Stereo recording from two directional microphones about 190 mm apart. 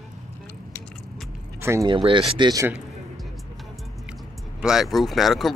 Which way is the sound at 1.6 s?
15° right (ahead or behind).